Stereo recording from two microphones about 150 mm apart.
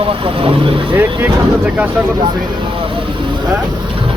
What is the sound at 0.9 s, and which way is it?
Speech, 15° right (ahead or behind).